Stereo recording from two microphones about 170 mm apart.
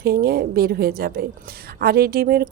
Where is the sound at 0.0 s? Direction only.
65° right (ahead or behind).